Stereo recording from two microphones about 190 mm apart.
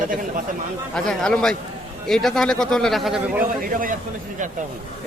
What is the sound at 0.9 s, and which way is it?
Speech, 5° left (ahead or behind).